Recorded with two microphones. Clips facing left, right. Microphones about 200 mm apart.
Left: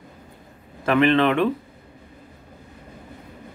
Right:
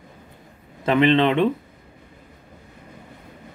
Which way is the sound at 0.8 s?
20° right (ahead or behind).